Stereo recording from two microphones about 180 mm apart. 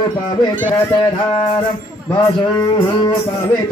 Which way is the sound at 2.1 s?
25° left (ahead or behind).